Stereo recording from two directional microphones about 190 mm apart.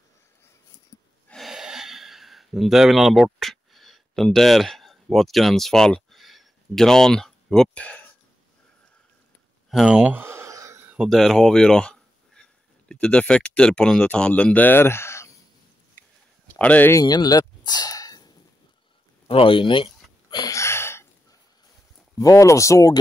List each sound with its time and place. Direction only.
1.3 s a sound: centre (ahead or behind)
9.7 s speech: 5° right (ahead or behind); by 15.3 s 15° left (ahead or behind)
16.5 s speech: 10° left (ahead or behind)
17.0 s speech: 20° left (ahead or behind)
19.2 s a sound: 30° left (ahead or behind); by 21.1 s 15° left (ahead or behind)
22.2 s speech: 15° left (ahead or behind)